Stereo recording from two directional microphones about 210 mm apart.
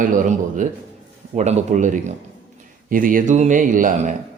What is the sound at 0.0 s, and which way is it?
A man's voice, 40° right (ahead or behind).